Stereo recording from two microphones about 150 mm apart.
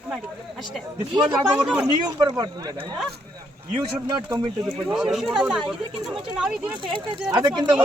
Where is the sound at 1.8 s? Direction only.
25° right (ahead or behind).